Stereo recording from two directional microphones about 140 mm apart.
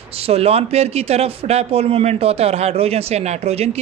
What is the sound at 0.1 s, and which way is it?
Speech, 45° right (ahead or behind).